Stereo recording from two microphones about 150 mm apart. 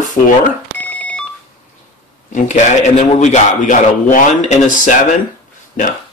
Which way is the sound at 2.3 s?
55° left (ahead or behind).